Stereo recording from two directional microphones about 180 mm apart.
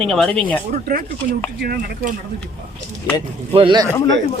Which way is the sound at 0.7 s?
55° right (ahead or behind).